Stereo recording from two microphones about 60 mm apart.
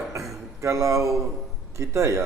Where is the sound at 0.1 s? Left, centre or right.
Right.